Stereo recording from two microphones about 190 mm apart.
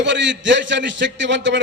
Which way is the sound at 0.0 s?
70° right (ahead or behind).